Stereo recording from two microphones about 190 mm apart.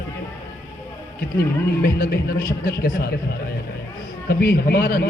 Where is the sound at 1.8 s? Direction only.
55° left (ahead or behind).